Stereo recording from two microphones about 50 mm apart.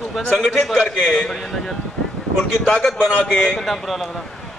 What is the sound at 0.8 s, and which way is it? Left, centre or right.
Speech, centre.